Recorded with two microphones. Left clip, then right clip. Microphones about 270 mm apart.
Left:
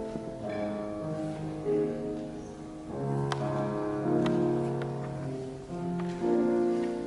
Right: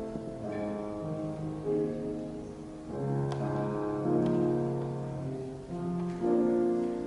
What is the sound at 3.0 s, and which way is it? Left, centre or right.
Music, centre.